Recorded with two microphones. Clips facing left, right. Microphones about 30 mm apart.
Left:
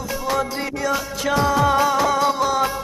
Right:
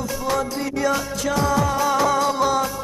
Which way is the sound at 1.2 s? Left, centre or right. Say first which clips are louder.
Left 4 dB; left.